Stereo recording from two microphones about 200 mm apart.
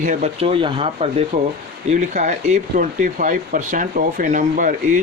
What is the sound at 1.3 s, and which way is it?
Speech, 45° right (ahead or behind).